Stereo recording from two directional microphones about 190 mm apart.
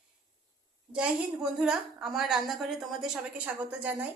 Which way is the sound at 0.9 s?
5° right (ahead or behind).